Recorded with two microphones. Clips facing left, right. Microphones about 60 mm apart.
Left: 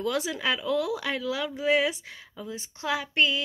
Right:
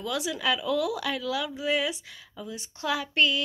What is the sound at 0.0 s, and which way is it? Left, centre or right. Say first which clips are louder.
Speech: left 1 dB; left.